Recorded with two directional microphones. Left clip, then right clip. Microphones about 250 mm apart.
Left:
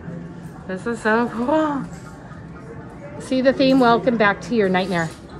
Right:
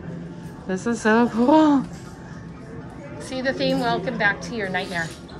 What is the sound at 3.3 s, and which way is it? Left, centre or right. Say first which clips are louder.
A woman's voice: left 7 dB; centre.